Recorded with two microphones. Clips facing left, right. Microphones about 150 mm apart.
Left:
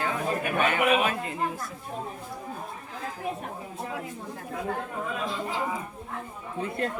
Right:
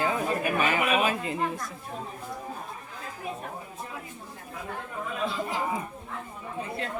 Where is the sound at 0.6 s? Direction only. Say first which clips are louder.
Left 3 dB; 5° right (ahead or behind).